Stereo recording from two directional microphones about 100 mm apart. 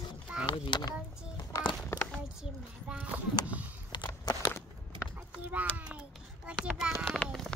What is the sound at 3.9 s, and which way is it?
Walk, 45° left (ahead or behind).